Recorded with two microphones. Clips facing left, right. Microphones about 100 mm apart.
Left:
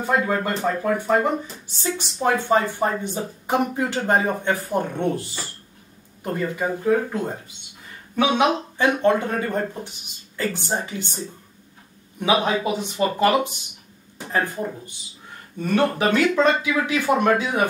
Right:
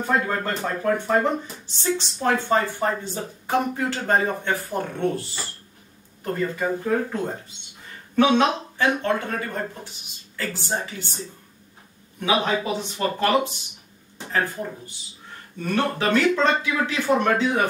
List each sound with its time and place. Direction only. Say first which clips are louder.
0.0 s speech: left 2 dB; 5° left (ahead or behind)
8.2 s speech: right 1 dB; 15° left (ahead or behind)
12.2 s speech: left 2 dB; 15° left (ahead or behind)
15.7 s speech: left 2 dB; 15° left (ahead or behind)